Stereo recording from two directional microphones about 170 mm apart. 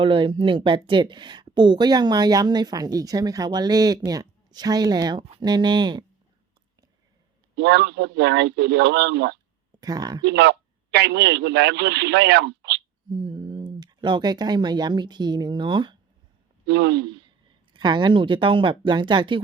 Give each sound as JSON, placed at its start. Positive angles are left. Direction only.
{"t": 0.0, "sound": "a woman's voice", "side_deg": -30}
{"t": 7.5, "sound": "a man's voice", "side_deg": -80}
{"t": 9.8, "sound": "a woman's voice", "side_deg": -25}
{"t": 10.2, "sound": "a man's voice", "side_deg": -80}
{"t": 13.1, "sound": "speech", "side_deg": -25}
{"t": 16.6, "sound": "a man's voice", "side_deg": -85}
{"t": 17.7, "sound": "a woman's voice", "side_deg": -25}